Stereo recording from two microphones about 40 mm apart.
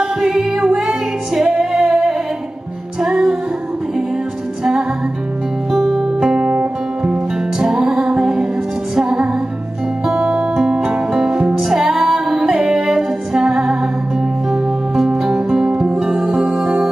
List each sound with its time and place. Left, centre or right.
0.7 s music: centre
3.0 s music: centre
5.7 s music: centre
6.1 s music: centre
6.4 s music: right
7.0 s music: centre
16.4 s music: centre